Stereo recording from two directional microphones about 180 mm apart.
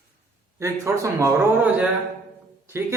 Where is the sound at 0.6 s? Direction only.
15° right (ahead or behind).